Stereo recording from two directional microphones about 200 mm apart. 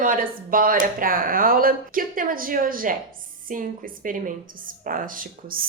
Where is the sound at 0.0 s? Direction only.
45° right (ahead or behind).